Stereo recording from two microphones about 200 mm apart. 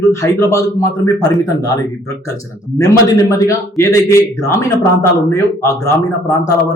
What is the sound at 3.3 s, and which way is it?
Speech, 15° left (ahead or behind).